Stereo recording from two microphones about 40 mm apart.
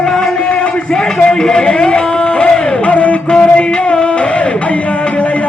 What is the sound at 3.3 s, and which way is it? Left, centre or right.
Music, left.